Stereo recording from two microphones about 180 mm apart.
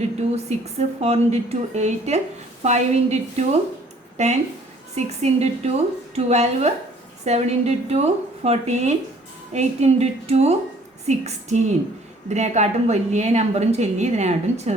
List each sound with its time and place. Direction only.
0.2 s a woman's voice: 35° right (ahead or behind)